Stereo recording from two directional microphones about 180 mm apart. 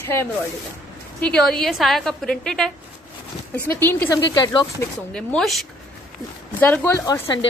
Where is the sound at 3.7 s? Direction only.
10° left (ahead or behind).